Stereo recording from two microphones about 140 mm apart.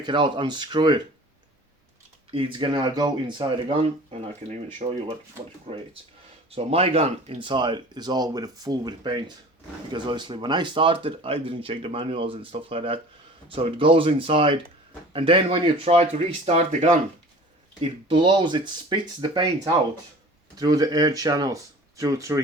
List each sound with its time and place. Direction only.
0.0 s speech: 35° right (ahead or behind)
2.3 s speech: 35° right (ahead or behind); by 17.0 s 55° right (ahead or behind)
17.7 s speech: 40° right (ahead or behind); by 22.4 s 25° right (ahead or behind)